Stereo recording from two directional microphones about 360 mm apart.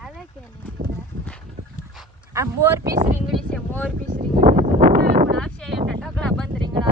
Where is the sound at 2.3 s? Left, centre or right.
Centre.